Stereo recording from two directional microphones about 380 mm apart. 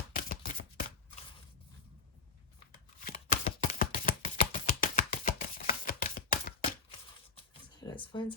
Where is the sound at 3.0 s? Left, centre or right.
Centre.